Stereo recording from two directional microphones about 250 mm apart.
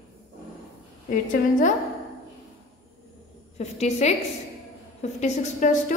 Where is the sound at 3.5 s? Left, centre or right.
Left.